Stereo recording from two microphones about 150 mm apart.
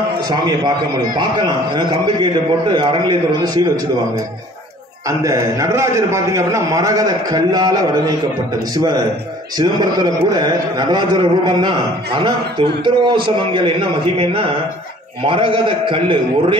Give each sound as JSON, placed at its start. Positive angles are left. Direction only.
{"t": 0.3, "sound": "a man's voice", "side_deg": -25}
{"t": 5.2, "sound": "a man's voice", "side_deg": -20}